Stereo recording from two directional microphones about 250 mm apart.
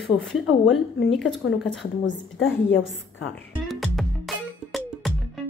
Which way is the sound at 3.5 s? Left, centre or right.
Centre.